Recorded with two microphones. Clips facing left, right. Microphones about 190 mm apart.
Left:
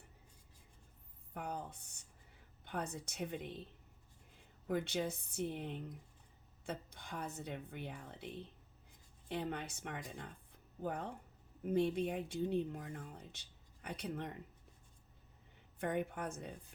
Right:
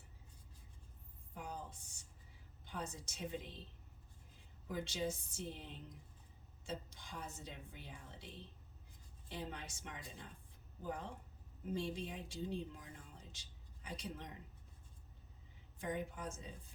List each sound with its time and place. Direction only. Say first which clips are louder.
1.3 s a sound: left 4 dB; 60° left (ahead or behind)
2.6 s speech: left 5 dB; 60° left (ahead or behind)
4.7 s speech: left 4 dB; 60° left (ahead or behind)
9.3 s speech: left 6 dB; 60° left (ahead or behind)
15.8 s speech: left 4 dB; 60° left (ahead or behind)